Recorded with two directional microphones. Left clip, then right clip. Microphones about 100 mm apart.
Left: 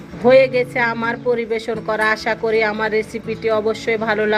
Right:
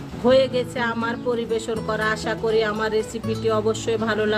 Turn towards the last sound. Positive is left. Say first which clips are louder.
# left 4 dB
turn(degrees=30)  # may be behind; listen again after turning